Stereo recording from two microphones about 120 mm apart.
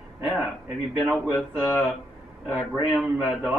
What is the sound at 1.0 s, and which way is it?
Speech, centre (ahead or behind).